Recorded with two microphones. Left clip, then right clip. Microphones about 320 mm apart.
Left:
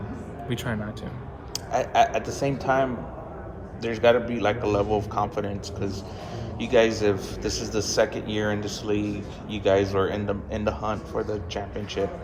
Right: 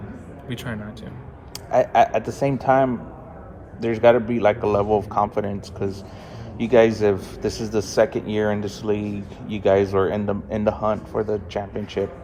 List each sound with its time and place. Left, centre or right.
0.4 s a man's voice: centre
1.5 s speech: right